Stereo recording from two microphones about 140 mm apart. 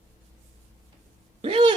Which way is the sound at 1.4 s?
35° right (ahead or behind).